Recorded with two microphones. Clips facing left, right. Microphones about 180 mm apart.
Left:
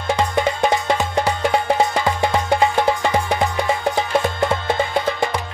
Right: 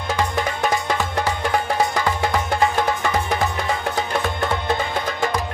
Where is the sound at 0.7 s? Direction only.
20° left (ahead or behind).